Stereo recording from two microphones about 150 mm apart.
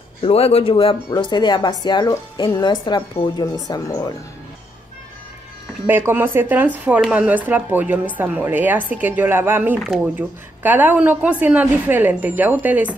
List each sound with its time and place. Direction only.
0.2 s speech: 40° left (ahead or behind); by 4.1 s 25° left (ahead or behind)
5.9 s a woman's voice: 15° right (ahead or behind)